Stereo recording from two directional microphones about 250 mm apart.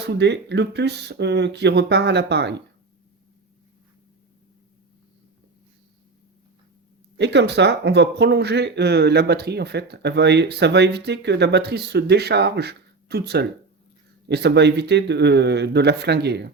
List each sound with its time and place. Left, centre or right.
0.0 s speech: right
7.2 s speech: right